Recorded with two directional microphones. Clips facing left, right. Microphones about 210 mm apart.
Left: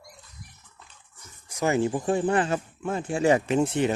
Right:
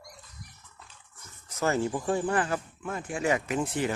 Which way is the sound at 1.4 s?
15° left (ahead or behind).